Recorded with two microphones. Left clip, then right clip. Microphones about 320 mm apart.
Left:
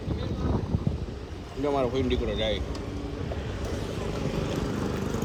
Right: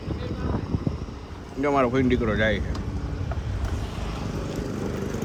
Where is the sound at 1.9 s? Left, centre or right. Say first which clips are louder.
Right 5 dB; centre.